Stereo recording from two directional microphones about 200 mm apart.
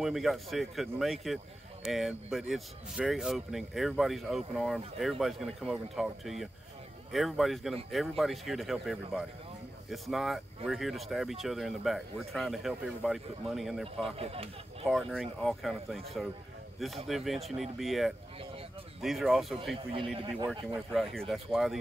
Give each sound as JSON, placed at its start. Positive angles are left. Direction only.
{"t": 0.0, "sound": "speech", "side_deg": 0}
{"t": 14.1, "sound": "speech", "side_deg": -30}
{"t": 14.9, "sound": "speech", "side_deg": 0}
{"t": 17.1, "sound": "speech", "side_deg": 0}